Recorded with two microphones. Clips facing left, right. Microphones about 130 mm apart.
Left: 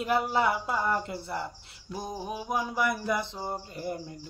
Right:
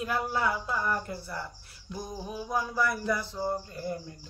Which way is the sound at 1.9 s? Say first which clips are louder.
Left 2 dB; 20° left (ahead or behind).